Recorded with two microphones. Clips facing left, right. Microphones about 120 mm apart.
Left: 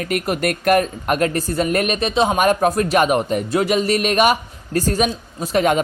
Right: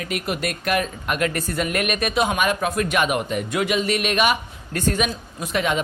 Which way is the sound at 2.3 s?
40° left (ahead or behind).